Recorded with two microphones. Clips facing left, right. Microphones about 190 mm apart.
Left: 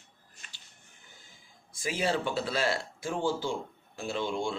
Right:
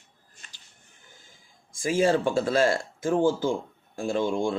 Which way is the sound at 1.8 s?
45° right (ahead or behind).